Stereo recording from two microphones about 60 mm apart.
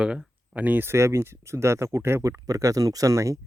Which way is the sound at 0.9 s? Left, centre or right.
Right.